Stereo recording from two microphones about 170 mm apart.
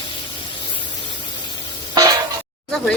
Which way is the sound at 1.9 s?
20° right (ahead or behind).